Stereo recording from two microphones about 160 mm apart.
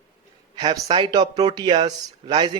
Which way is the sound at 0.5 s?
30° right (ahead or behind).